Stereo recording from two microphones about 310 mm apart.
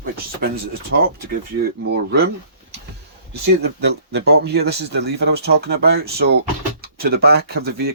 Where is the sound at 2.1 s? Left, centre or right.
Right.